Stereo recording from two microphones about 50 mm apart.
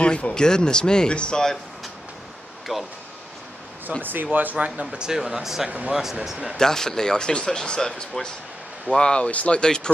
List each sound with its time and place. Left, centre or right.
0.0 s speech: centre
2.7 s speech: centre
4.0 s speech: right
4.6 s speech: centre
5.7 s speech: right
6.2 s speech: centre
6.5 s speech: centre
9.6 s speech: centre